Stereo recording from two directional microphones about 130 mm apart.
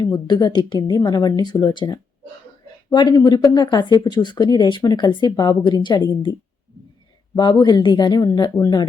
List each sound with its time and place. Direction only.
0.0 s speech: 30° left (ahead or behind)
7.3 s speech: 35° left (ahead or behind)